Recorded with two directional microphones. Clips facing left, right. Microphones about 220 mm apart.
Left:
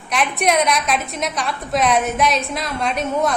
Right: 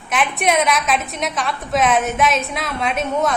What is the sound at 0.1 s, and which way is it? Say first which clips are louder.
A woman's voice: even; centre (ahead or behind).